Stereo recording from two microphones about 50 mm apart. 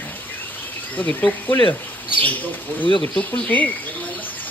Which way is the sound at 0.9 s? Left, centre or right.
Left.